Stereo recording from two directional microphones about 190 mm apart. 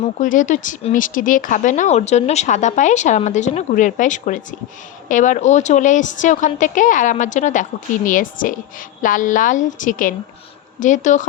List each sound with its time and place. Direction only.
0.0 s a woman's voice: 40° left (ahead or behind)